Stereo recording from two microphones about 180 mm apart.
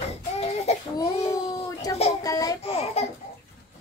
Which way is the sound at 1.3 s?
20° left (ahead or behind).